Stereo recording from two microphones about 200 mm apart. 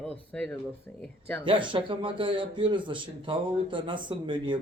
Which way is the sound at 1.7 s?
25° right (ahead or behind).